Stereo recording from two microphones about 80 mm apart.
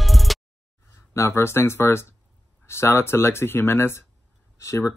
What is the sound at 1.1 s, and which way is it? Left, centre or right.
Speech, left.